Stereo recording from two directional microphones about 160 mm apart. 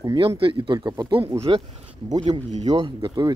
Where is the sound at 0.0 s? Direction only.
25° right (ahead or behind).